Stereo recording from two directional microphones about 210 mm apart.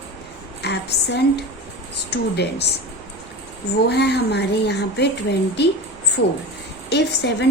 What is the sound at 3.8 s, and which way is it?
A woman's voice, 50° left (ahead or behind).